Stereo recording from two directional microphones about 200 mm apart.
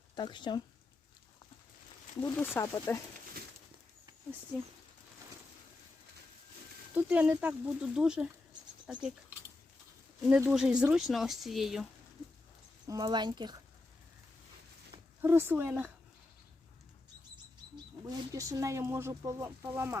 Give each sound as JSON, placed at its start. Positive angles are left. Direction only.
{"t": 0.2, "sound": "speech", "side_deg": 20}
{"t": 2.6, "sound": "speech", "side_deg": 15}
{"t": 6.9, "sound": "speech", "side_deg": -5}
{"t": 10.2, "sound": "speech", "side_deg": -5}
{"t": 12.9, "sound": "speech", "side_deg": -20}
{"t": 15.2, "sound": "speech", "side_deg": -10}
{"t": 18.0, "sound": "speech", "side_deg": -15}